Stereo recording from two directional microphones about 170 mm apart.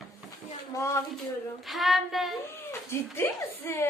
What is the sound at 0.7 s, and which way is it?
Speech, 15° left (ahead or behind).